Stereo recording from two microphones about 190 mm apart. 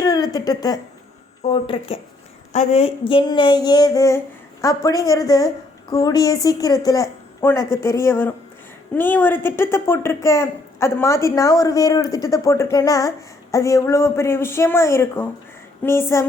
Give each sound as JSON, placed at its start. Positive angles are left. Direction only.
{"t": 0.0, "sound": "speech", "side_deg": 20}
{"t": 1.5, "sound": "female singing", "side_deg": 25}
{"t": 2.5, "sound": "a woman's voice", "side_deg": 35}
{"t": 3.1, "sound": "female singing", "side_deg": 25}
{"t": 5.9, "sound": "speech", "side_deg": 20}